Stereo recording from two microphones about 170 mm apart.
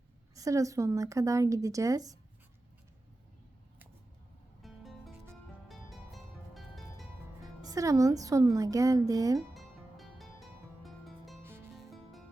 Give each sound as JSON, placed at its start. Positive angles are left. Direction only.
{"t": 0.3, "sound": "a woman's voice", "side_deg": -20}
{"t": 4.6, "sound": "music", "side_deg": 0}
{"t": 7.6, "sound": "a woman's voice", "side_deg": -20}
{"t": 9.6, "sound": "music", "side_deg": 0}